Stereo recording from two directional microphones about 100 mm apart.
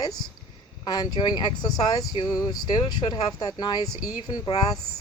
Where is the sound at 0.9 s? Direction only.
45° left (ahead or behind).